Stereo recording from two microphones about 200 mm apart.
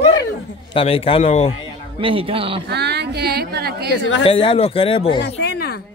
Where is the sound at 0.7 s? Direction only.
30° left (ahead or behind).